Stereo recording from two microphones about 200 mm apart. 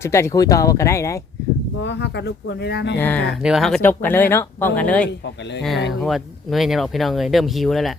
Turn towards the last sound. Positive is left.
turn(degrees=0)  # may be behind; listen again after turning